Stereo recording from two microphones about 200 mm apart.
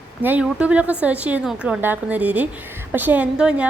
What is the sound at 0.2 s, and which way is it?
A woman's voice, 10° right (ahead or behind).